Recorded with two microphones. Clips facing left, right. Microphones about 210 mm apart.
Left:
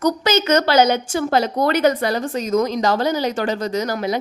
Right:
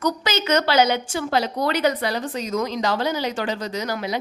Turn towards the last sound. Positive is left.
turn(degrees=45)  # may be behind; listen again after turning